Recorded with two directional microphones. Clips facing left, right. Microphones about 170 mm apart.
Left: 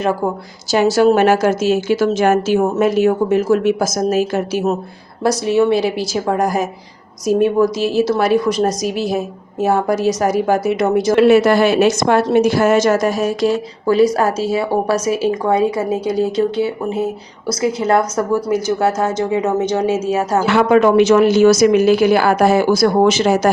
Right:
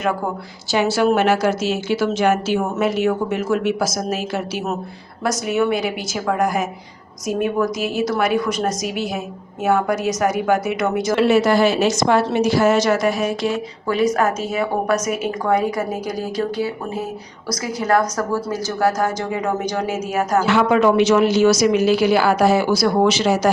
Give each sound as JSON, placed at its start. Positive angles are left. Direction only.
{"t": 0.7, "sound": "a woman's voice", "side_deg": 40}
{"t": 5.2, "sound": "a woman's voice", "side_deg": 30}
{"t": 11.1, "sound": "a woman's voice", "side_deg": 55}
{"t": 20.6, "sound": "a woman's voice", "side_deg": 50}